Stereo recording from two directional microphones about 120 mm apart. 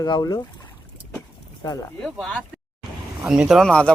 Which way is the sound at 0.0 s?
35° left (ahead or behind).